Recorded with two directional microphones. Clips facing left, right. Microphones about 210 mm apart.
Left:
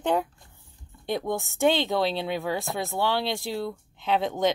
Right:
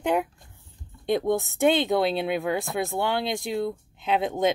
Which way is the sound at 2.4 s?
20° right (ahead or behind).